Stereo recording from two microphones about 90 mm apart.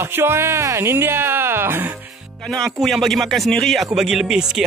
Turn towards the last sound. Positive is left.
turn(degrees=-5)  # may be behind; listen again after turning